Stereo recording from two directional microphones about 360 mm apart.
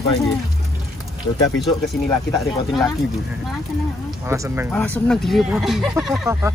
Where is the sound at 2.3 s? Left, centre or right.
Centre.